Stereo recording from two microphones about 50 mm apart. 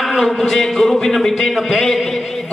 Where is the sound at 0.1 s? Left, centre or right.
Centre.